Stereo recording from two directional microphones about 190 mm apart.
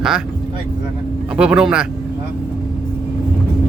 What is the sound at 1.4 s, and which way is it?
Speech, 5° right (ahead or behind).